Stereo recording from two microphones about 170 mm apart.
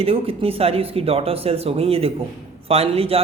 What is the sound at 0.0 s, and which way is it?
Speech, 35° right (ahead or behind).